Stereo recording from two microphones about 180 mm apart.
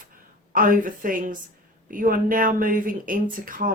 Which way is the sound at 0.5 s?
50° right (ahead or behind).